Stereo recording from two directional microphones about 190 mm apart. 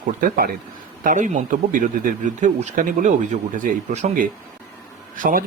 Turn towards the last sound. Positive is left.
turn(degrees=-45)  # may be behind; listen again after turning